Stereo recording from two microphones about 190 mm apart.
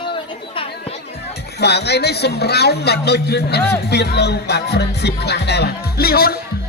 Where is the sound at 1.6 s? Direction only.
60° left (ahead or behind).